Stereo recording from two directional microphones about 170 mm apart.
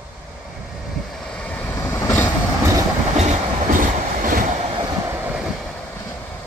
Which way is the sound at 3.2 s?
45° right (ahead or behind).